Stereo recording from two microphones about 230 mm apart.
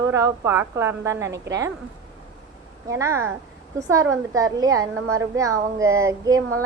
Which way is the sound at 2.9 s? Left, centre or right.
Centre.